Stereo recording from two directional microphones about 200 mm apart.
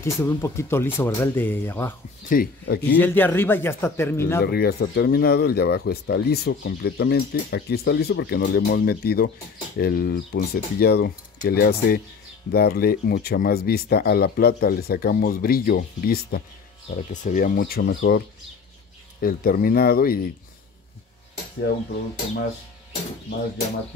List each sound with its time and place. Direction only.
0.0 s speech: 15° left (ahead or behind)
2.2 s speech: 45° left (ahead or behind)
3.0 s speech: 10° left (ahead or behind)
4.4 s speech: 50° left (ahead or behind)
17.1 s speech: 40° left (ahead or behind)
19.2 s speech: 45° left (ahead or behind)